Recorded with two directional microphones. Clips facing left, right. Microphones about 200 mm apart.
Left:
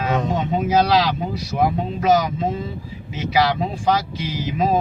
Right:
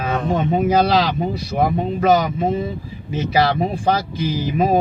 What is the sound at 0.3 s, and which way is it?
A man's voice, 55° right (ahead or behind).